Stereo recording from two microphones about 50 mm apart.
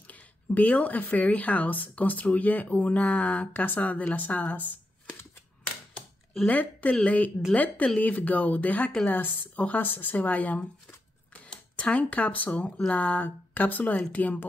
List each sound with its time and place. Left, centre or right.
0.0 s speech: left
6.5 s speech: left
11.7 s speech: left